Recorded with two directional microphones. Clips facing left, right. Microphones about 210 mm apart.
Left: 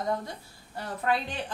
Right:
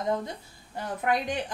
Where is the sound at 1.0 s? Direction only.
15° right (ahead or behind).